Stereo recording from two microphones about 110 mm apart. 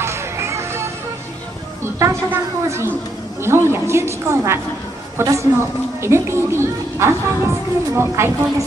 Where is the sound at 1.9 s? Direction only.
25° right (ahead or behind).